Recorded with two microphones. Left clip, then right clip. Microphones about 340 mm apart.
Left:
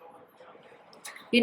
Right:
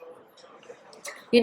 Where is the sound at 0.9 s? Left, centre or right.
Right.